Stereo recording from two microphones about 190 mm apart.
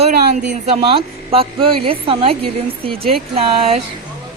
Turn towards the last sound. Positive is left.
turn(degrees=-35)  # may be behind; listen again after turning